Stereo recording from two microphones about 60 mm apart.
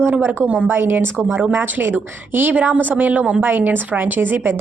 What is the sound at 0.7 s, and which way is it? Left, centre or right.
A woman's voice, right.